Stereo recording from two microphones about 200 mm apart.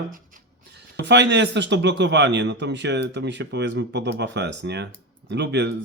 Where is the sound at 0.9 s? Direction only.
60° right (ahead or behind).